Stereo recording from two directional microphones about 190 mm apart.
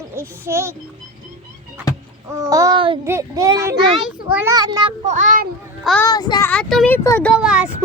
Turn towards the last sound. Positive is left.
turn(degrees=-5)  # may be behind; listen again after turning